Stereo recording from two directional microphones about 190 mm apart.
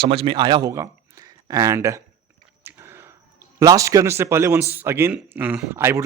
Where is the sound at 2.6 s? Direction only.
10° right (ahead or behind).